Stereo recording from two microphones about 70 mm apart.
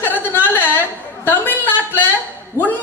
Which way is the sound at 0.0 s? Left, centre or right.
Left.